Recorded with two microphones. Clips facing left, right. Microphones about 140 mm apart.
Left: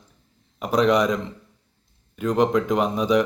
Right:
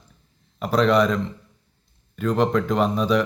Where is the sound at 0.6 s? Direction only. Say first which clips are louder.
Even; 15° left (ahead or behind).